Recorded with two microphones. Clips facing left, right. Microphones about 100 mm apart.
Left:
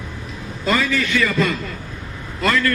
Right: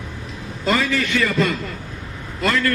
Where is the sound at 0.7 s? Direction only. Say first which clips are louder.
Even; 45° right (ahead or behind).